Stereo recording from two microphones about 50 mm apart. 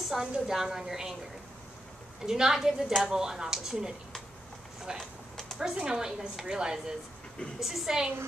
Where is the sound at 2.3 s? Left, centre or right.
Centre.